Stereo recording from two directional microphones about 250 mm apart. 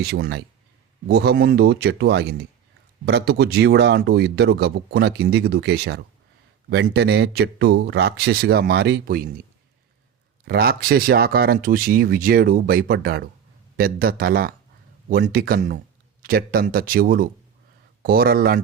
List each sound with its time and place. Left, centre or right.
0.0 s speech: right
10.4 s speech: right